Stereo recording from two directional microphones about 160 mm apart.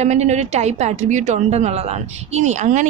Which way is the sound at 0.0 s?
45° right (ahead or behind).